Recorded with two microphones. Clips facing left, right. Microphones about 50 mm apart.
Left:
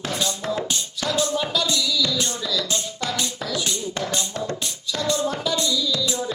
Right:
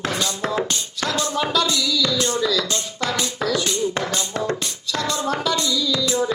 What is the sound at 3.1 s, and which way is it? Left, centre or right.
Music, centre.